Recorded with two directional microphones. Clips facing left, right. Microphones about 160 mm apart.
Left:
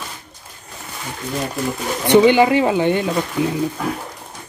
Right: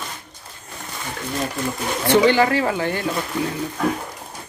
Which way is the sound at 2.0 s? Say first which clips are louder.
Left 4 dB; 15° left (ahead or behind).